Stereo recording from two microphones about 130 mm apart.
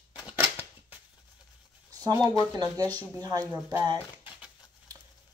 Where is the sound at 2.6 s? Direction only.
30° right (ahead or behind).